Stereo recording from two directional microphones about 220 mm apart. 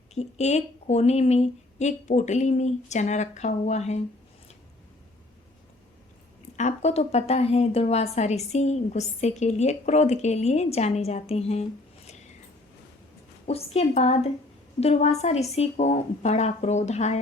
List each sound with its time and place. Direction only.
0.1 s a woman's voice: 30° left (ahead or behind)
6.6 s a woman's voice: 30° left (ahead or behind)
13.5 s a woman's voice: 25° left (ahead or behind)